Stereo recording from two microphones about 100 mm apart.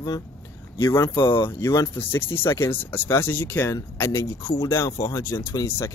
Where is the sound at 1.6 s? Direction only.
35° left (ahead or behind).